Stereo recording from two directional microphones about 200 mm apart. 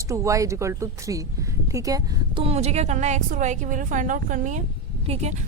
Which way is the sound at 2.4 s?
30° right (ahead or behind).